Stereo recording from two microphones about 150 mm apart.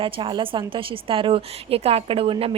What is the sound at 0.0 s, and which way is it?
A woman's voice, 35° right (ahead or behind).